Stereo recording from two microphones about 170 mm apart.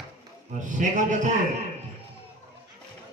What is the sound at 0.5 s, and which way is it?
Speech, 45° right (ahead or behind).